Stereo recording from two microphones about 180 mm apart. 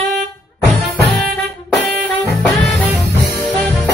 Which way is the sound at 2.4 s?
5° left (ahead or behind).